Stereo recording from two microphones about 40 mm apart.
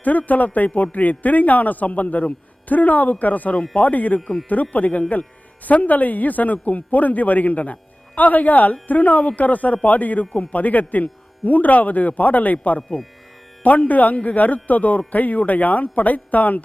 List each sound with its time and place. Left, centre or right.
0.0 s a man's voice: left